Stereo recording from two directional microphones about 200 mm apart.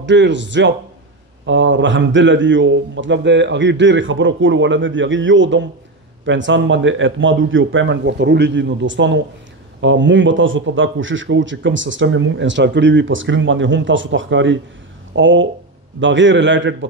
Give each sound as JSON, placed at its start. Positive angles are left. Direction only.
{"t": 0.0, "sound": "speech", "side_deg": -65}